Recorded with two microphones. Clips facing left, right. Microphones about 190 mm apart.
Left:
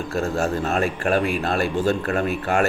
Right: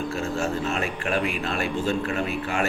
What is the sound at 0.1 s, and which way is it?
A man's voice, 40° left (ahead or behind).